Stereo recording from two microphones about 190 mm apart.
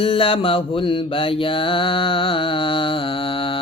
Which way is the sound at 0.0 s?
30° left (ahead or behind).